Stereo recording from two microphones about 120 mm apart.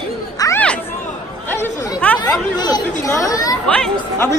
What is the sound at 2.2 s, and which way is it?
Speech, 35° left (ahead or behind).